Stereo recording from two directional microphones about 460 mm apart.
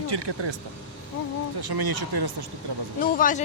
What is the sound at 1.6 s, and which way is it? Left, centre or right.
Speech, right.